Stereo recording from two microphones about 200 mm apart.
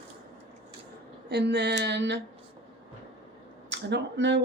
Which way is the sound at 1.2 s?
55° right (ahead or behind).